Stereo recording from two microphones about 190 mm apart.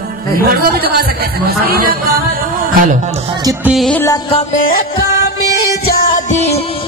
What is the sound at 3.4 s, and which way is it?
Music, 15° right (ahead or behind).